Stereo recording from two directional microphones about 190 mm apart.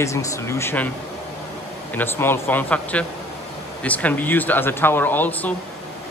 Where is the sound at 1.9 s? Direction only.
10° left (ahead or behind).